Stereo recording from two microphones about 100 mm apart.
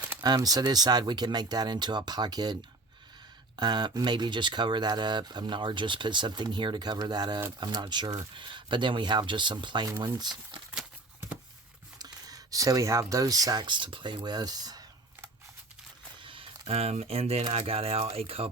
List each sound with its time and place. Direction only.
0.2 s speech: 40° right (ahead or behind)
3.6 s speech: 45° right (ahead or behind)
11.9 s speech: 40° right (ahead or behind)
14.2 s cutlery: 40° right (ahead or behind)
16.2 s speech: 60° right (ahead or behind); by 18.5 s 80° right